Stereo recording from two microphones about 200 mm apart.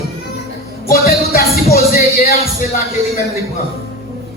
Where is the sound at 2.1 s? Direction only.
30° left (ahead or behind).